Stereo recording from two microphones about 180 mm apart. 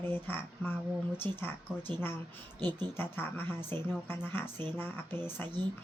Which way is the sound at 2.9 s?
10° left (ahead or behind).